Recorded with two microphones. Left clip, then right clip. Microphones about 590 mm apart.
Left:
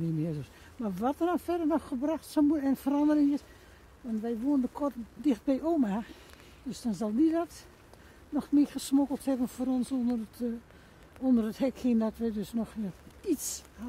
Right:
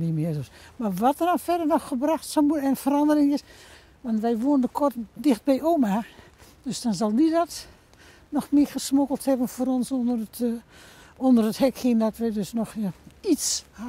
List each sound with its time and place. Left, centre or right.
0.2 s speech: centre